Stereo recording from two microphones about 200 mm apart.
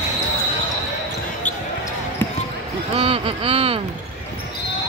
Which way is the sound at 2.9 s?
30° right (ahead or behind).